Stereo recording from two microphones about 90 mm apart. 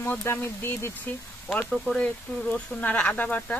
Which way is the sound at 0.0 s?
25° left (ahead or behind).